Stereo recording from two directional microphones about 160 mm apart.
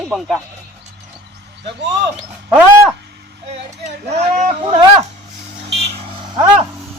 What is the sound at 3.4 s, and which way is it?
Speech, 45° right (ahead or behind).